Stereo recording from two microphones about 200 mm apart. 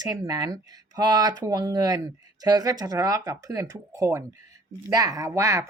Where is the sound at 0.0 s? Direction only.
20° right (ahead or behind).